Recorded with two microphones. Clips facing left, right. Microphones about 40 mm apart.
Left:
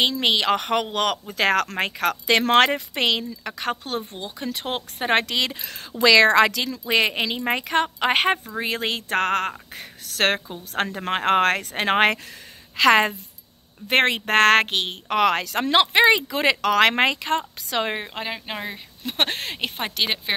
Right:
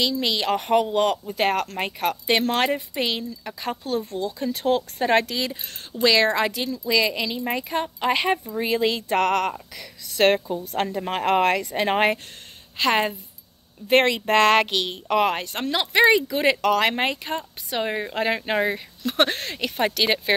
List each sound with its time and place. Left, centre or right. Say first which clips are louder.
0.2 s speech: left 3 dB; left
3.6 s speech: right 1 dB; left
4.0 s speech: right 5 dB; left
6.2 s speech: left 5 dB; left
6.8 s speech: left 1 dB; left
10.0 s speech: right 3 dB; left
11.0 s speech: left 1 dB; left
12.9 s a woman's voice: left 2 dB; left
13.8 s speech: right 1 dB; left
15.3 s speech: left 6 dB; left
15.9 s speech: even; left
18.2 s speech: right 8 dB; centre
19.0 s speech: right 3 dB; left
19.8 s speech: right 5 dB; centre